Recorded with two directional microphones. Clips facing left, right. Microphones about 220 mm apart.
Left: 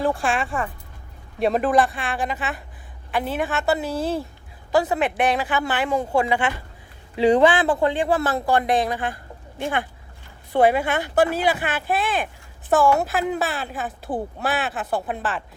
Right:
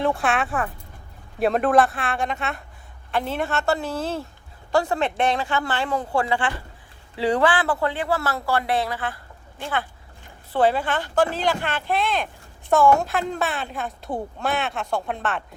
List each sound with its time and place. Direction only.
0.2 s a woman's voice: centre (ahead or behind)
4.7 s a woman's voice: 20° left (ahead or behind); by 15.4 s centre (ahead or behind)